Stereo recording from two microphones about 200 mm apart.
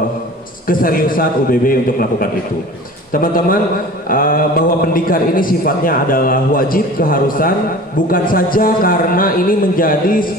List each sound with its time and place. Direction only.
0.7 s a man's voice: 45° left (ahead or behind)